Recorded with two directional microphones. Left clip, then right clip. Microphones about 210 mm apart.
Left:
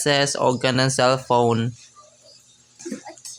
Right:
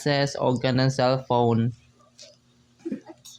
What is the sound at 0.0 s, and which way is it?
Speech, 40° left (ahead or behind).